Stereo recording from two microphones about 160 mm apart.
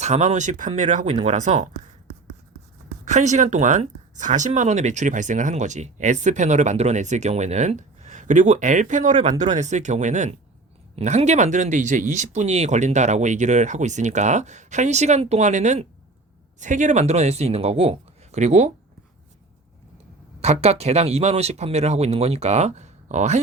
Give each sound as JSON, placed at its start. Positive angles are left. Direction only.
{"t": 0.0, "sound": "speech", "side_deg": -45}
{"t": 3.0, "sound": "speech", "side_deg": -50}
{"t": 20.4, "sound": "speech", "side_deg": -40}